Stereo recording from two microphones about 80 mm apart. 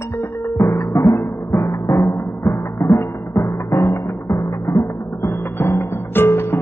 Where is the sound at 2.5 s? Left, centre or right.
Left.